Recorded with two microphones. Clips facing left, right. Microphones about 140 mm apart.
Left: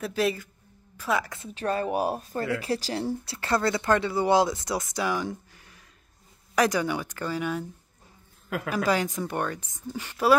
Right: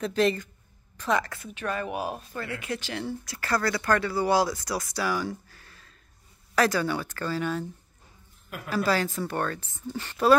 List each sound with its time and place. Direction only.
0.0 s speech: 5° left (ahead or behind)
1.5 s speech: 35° left (ahead or behind); by 7.6 s 15° left (ahead or behind)
8.6 s speech: 15° left (ahead or behind)